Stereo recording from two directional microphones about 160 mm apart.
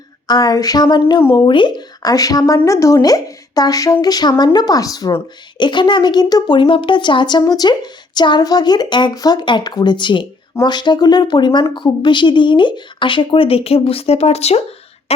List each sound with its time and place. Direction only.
0.3 s a woman's voice: 25° left (ahead or behind); by 14.6 s 40° left (ahead or behind)